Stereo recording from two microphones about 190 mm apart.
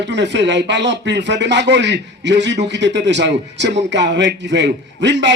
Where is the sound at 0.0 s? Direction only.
65° right (ahead or behind).